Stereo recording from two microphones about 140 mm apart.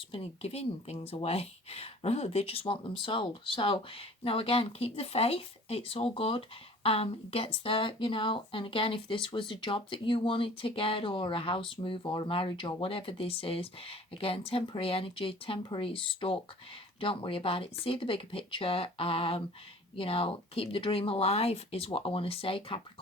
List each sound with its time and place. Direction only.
0.1 s a woman's voice: 45° left (ahead or behind)